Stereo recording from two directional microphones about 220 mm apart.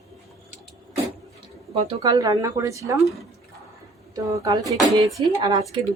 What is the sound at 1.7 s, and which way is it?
Speech, 20° right (ahead or behind).